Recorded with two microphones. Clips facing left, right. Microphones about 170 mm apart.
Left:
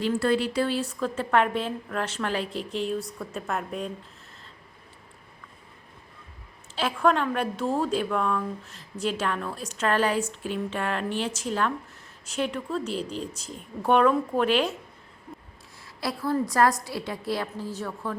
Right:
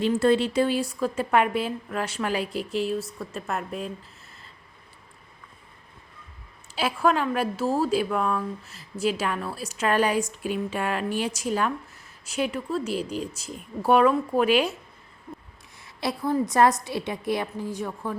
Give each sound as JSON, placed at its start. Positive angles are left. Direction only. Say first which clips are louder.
{"t": 0.0, "sound": "a woman's voice", "louder": "right 3 dB", "side_deg": -20}
{"t": 6.7, "sound": "a woman's voice", "louder": "even", "side_deg": -10}
{"t": 15.8, "sound": "a woman's voice", "louder": "right 2 dB", "side_deg": -20}